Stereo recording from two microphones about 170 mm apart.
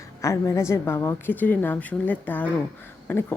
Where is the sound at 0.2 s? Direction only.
15° left (ahead or behind).